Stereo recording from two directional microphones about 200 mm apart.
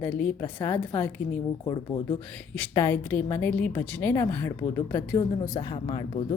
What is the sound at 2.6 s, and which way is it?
A woman's voice, 10° left (ahead or behind).